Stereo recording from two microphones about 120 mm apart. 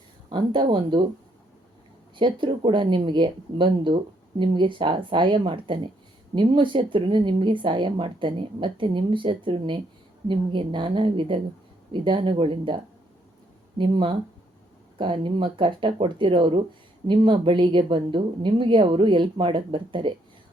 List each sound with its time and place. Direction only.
0.3 s speech: 40° right (ahead or behind)
2.1 s speech: 45° right (ahead or behind)